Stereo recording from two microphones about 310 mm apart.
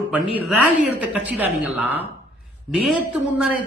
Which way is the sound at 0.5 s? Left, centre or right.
Right.